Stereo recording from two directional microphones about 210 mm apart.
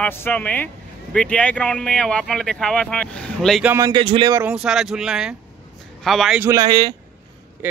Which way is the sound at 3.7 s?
20° right (ahead or behind).